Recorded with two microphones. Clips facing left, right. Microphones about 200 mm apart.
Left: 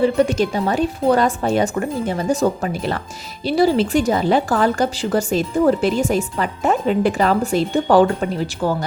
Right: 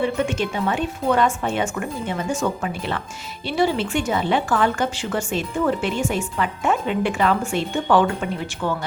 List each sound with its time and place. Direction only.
0.0 s speech: 35° left (ahead or behind)